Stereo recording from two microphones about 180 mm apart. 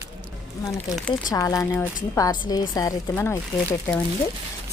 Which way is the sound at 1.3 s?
20° left (ahead or behind).